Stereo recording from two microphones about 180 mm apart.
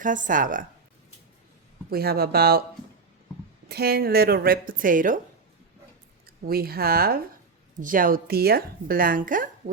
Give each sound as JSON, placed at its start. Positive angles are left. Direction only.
{"t": 0.0, "sound": "a woman's voice", "side_deg": -45}
{"t": 1.9, "sound": "a woman's voice", "side_deg": -60}
{"t": 3.7, "sound": "a woman's voice", "side_deg": -60}
{"t": 6.2, "sound": "a woman's voice", "side_deg": -55}